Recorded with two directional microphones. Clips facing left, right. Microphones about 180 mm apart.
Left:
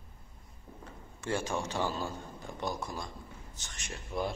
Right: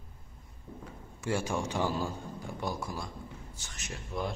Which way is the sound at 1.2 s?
10° right (ahead or behind).